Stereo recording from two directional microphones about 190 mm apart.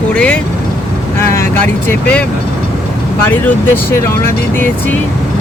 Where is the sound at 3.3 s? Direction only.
10° left (ahead or behind).